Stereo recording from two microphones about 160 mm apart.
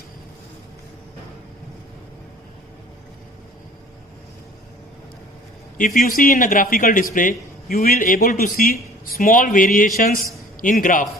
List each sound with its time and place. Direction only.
5.7 s a man's voice: 55° left (ahead or behind)